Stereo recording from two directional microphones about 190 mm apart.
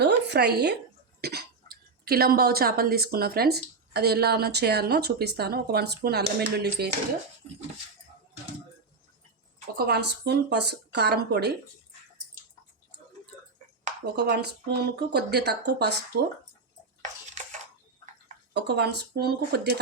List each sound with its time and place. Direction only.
0.0 s a sound: 60° right (ahead or behind)
1.2 s speech: 55° right (ahead or behind)
9.7 s speech: 60° right (ahead or behind)
14.2 s speech: 60° right (ahead or behind)
18.5 s speech: 60° right (ahead or behind)